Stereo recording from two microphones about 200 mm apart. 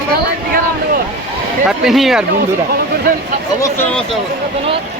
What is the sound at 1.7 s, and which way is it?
Speech, centre (ahead or behind).